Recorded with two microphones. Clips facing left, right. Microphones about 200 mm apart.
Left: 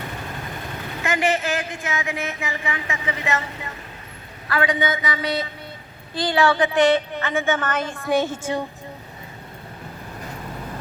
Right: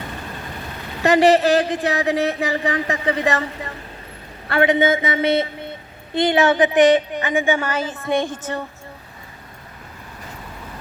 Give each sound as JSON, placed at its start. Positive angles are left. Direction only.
{"t": 1.0, "sound": "speech", "side_deg": -35}
{"t": 4.4, "sound": "a woman's voice", "side_deg": -25}